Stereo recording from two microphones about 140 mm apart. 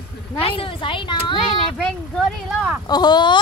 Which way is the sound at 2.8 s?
30° left (ahead or behind).